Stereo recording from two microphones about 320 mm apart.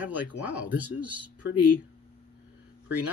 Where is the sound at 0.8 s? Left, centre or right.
Right.